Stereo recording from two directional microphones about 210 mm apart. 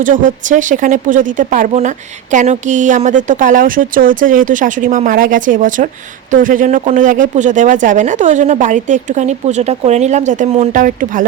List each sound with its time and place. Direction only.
0.0 s speech: 40° right (ahead or behind)